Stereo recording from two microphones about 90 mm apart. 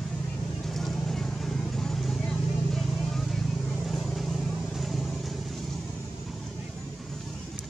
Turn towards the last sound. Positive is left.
turn(degrees=0)  # may be behind; listen again after turning